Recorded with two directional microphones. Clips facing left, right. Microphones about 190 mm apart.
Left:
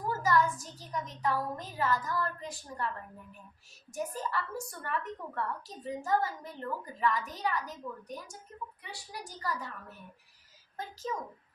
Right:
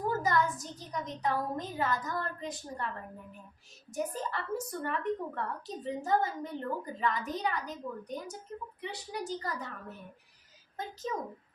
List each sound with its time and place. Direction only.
0.1 s a woman's voice: 20° right (ahead or behind)
3.9 s a woman's voice: 20° right (ahead or behind)
10.8 s a woman's voice: 20° right (ahead or behind)